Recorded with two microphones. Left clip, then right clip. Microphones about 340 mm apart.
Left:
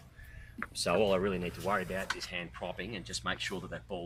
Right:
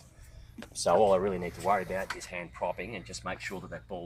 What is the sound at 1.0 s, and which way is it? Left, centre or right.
Speech, centre.